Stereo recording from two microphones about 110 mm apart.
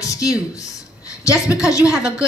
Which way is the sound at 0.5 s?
30° left (ahead or behind).